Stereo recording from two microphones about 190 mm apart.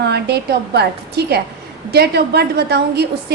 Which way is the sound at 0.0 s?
60° right (ahead or behind).